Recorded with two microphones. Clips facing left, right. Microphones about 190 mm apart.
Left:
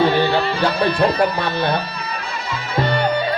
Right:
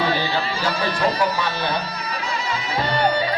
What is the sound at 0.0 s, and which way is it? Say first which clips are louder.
Speech: left 6 dB; 55° left (ahead or behind).